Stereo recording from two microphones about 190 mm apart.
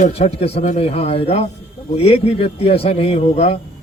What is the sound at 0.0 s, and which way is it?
Speech, 35° left (ahead or behind).